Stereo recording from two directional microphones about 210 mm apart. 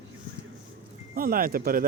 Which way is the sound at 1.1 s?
45° right (ahead or behind).